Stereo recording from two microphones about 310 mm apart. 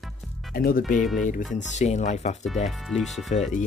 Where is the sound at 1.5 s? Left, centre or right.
Left.